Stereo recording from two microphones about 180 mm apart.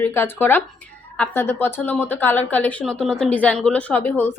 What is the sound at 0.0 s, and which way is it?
A woman's voice, 10° left (ahead or behind).